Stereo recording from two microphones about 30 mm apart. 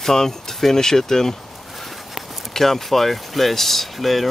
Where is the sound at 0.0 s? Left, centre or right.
Centre.